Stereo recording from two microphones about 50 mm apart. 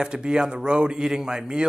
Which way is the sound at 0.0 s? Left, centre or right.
Centre.